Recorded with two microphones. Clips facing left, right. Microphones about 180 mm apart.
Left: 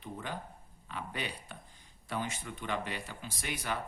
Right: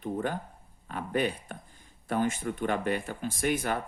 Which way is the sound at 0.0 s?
50° right (ahead or behind).